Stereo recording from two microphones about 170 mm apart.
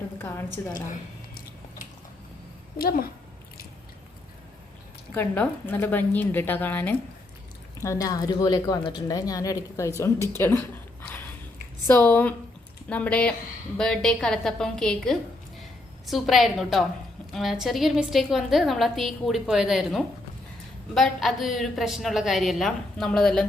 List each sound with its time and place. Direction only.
0.2 s a woman's voice: 10° left (ahead or behind)
2.7 s a woman's voice: 60° left (ahead or behind)
5.1 s a woman's voice: 10° left (ahead or behind)
11.9 s a woman's voice: 10° left (ahead or behind)